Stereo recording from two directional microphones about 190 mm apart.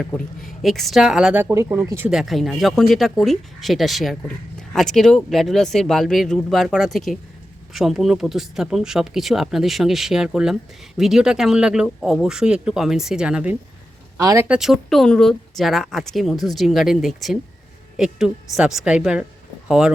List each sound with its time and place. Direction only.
0.0 s speech: centre (ahead or behind)
2.0 s speech: centre (ahead or behind)
14.2 s speech: 15° right (ahead or behind)
14.4 s speech: 5° right (ahead or behind)